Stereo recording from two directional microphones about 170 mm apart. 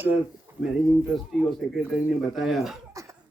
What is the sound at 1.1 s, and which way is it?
Speech, centre (ahead or behind).